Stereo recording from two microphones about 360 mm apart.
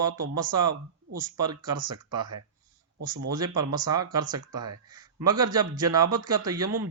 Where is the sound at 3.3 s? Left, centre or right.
Centre.